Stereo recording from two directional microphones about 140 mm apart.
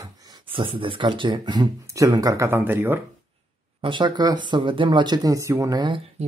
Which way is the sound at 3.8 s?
35° right (ahead or behind).